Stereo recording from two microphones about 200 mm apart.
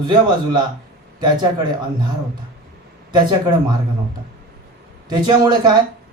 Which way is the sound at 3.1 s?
20° right (ahead or behind).